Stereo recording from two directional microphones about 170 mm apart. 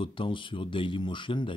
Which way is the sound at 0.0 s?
30° left (ahead or behind).